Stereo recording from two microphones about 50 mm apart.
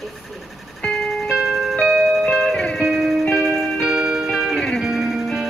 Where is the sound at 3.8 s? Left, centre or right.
Centre.